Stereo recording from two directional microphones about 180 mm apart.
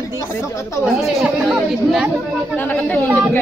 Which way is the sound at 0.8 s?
Centre (ahead or behind).